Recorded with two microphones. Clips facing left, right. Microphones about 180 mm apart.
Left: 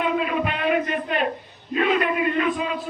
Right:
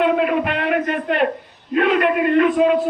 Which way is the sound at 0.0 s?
65° right (ahead or behind).